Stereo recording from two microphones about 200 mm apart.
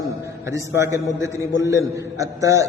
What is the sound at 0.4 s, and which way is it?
A man's voice, 15° right (ahead or behind).